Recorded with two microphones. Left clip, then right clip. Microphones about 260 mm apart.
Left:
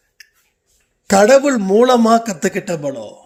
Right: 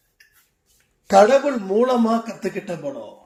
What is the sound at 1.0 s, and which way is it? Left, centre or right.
A man's voice, left.